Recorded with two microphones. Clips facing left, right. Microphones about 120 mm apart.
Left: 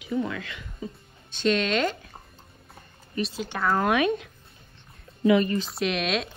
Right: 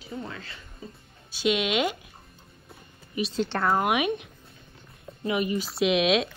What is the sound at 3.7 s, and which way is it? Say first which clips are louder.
Speech: left 4 dB; 15° right (ahead or behind).